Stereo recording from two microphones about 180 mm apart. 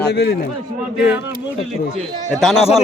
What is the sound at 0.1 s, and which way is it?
Speech, 65° left (ahead or behind).